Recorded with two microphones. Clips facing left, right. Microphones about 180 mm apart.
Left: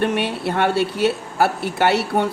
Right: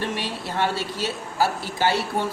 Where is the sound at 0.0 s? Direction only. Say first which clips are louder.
Left 8 dB; 60° left (ahead or behind).